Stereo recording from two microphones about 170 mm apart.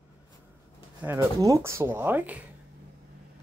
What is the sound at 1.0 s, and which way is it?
Speech, 20° right (ahead or behind).